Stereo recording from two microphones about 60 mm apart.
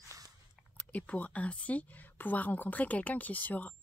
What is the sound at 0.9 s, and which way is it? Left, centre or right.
A woman's voice, left.